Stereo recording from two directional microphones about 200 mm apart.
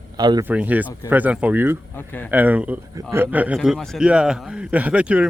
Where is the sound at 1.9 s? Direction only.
10° left (ahead or behind).